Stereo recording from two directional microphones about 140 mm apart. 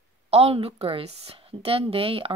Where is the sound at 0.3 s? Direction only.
45° right (ahead or behind).